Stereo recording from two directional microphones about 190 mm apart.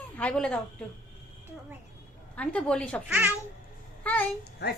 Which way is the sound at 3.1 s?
10° right (ahead or behind).